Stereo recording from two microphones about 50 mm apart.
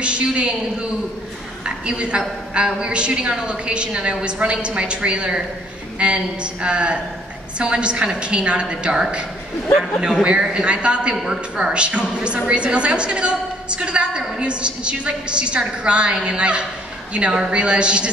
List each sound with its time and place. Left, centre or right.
0.0 s a woman's voice: right